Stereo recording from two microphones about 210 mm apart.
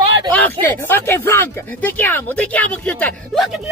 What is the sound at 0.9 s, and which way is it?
Speech, 10° left (ahead or behind).